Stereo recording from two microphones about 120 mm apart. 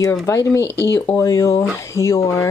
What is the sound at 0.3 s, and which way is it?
Speech, 25° left (ahead or behind).